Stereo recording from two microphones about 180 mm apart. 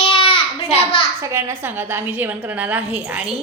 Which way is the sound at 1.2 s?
15° right (ahead or behind).